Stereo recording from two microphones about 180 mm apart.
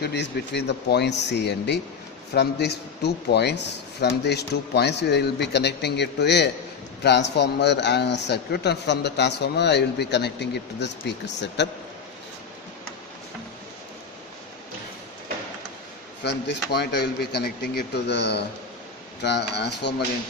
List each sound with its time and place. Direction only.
0.0 s a man's voice: 70° left (ahead or behind)
16.7 s a man's voice: 65° left (ahead or behind)